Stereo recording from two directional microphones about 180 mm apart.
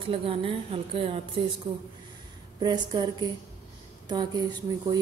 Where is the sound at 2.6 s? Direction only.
25° right (ahead or behind).